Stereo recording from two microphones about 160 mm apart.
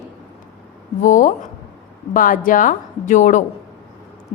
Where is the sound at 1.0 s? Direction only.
55° left (ahead or behind).